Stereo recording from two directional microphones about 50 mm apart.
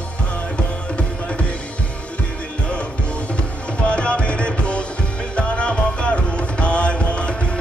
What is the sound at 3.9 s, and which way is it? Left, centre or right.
Music, left.